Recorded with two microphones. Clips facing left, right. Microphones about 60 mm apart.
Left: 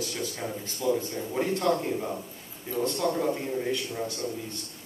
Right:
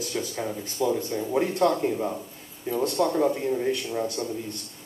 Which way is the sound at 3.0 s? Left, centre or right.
Centre.